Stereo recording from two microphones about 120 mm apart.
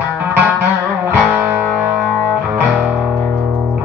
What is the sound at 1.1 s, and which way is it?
Music, 15° right (ahead or behind).